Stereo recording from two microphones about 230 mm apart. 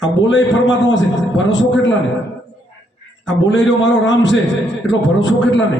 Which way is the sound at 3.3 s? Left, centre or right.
Left.